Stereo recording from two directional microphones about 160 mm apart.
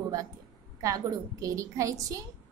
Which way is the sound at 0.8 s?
20° right (ahead or behind).